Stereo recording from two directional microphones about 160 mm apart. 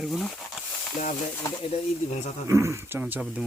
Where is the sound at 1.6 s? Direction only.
40° left (ahead or behind).